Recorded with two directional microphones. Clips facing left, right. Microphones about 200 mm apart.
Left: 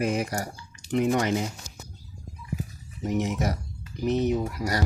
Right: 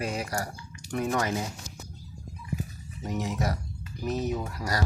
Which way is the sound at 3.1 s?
20° left (ahead or behind).